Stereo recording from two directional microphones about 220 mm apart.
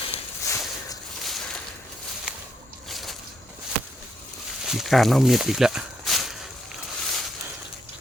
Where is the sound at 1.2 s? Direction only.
Centre (ahead or behind).